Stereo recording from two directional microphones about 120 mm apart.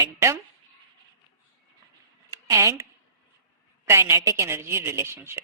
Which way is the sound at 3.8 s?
20° right (ahead or behind).